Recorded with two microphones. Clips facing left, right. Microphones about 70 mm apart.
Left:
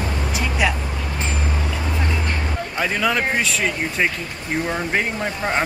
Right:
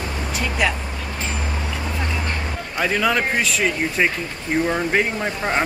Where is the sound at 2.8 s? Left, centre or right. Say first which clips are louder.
Right 1 dB; centre.